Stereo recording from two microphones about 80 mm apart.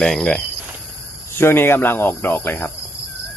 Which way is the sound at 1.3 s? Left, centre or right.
Left.